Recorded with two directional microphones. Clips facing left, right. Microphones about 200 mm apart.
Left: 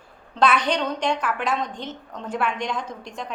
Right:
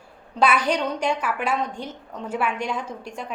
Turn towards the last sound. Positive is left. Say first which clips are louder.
# even
turn(degrees=-10)  # may be behind; listen again after turning